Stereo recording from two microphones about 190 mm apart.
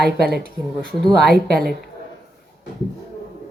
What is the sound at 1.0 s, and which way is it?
Speech, centre (ahead or behind).